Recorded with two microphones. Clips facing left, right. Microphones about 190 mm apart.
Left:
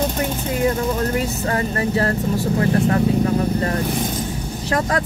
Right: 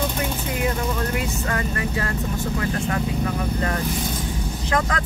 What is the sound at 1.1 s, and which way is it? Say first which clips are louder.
Speech: left 4 dB; 35° left (ahead or behind).